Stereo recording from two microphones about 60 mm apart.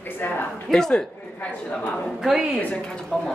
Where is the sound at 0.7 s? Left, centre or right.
Centre.